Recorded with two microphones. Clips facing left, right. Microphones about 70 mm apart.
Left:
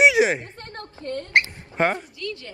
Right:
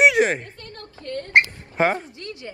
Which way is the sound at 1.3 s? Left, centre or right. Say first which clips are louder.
Right 3 dB; right.